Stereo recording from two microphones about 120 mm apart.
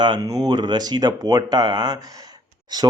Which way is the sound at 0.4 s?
35° right (ahead or behind).